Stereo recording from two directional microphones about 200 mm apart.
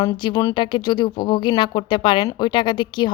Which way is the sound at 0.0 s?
20° left (ahead or behind).